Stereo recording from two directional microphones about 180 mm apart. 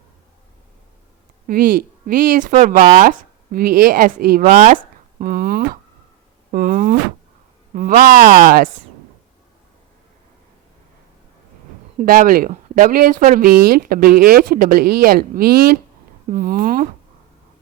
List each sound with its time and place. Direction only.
1.5 s speech: 50° right (ahead or behind)
11.9 s speech: 50° right (ahead or behind)